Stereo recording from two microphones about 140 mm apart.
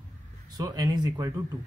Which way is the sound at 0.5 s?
25° right (ahead or behind).